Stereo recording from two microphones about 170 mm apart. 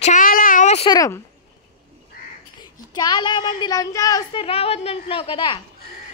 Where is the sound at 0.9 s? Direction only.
20° left (ahead or behind).